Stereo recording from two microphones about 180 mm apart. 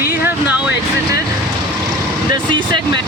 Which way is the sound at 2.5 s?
25° right (ahead or behind).